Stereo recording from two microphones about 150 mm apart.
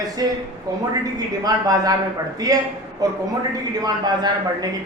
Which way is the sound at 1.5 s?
25° right (ahead or behind).